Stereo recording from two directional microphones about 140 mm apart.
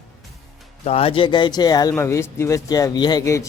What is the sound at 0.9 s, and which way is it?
A man's voice, 45° left (ahead or behind).